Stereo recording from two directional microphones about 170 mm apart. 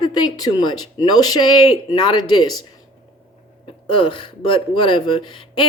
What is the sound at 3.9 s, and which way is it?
Speech, 30° left (ahead or behind).